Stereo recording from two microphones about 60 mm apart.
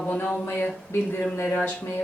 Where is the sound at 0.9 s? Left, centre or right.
Left.